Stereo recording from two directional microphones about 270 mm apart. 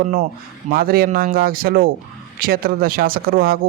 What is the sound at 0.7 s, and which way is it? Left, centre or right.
Speech, right.